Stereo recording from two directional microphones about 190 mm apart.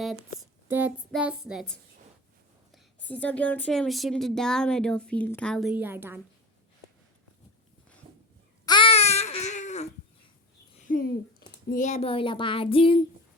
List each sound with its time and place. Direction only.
0.7 s speech: 10° right (ahead or behind)
8.6 s babbling: 25° left (ahead or behind)
10.8 s a sound: 50° left (ahead or behind)
11.7 s female singing: 40° left (ahead or behind)